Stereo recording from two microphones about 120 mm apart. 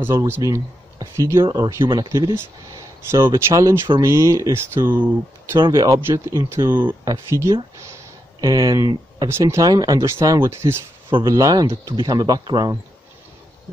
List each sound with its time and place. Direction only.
0.3 s speech: 25° right (ahead or behind)
11.1 s speech: 45° right (ahead or behind)
11.3 s speech: 30° right (ahead or behind)
11.7 s speech: 40° right (ahead or behind)